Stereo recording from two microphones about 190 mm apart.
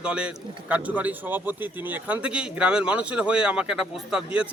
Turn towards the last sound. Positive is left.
turn(degrees=-5)  # may be behind; listen again after turning